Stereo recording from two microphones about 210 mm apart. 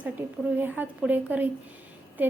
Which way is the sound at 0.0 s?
10° right (ahead or behind).